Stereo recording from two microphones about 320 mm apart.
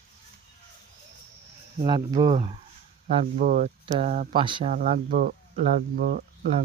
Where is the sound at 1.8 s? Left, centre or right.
Centre.